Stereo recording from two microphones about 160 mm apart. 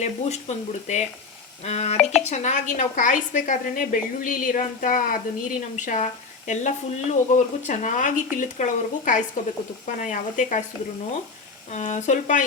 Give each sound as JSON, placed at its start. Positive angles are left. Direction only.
{"t": 0.0, "sound": "a woman's voice", "side_deg": 45}
{"t": 11.7, "sound": "speech", "side_deg": 50}